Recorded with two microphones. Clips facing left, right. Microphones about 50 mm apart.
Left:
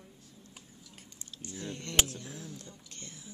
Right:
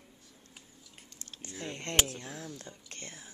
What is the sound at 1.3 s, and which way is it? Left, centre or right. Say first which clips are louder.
Speech: even; right.